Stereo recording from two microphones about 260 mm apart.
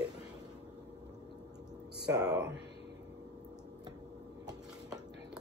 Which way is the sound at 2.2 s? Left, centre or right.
Centre.